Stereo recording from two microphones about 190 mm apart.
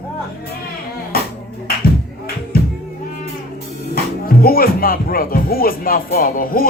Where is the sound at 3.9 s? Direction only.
50° left (ahead or behind).